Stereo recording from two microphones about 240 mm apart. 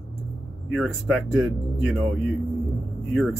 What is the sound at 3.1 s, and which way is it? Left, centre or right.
Speech, centre.